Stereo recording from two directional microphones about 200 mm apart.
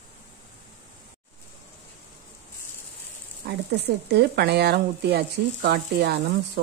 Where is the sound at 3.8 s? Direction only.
55° right (ahead or behind).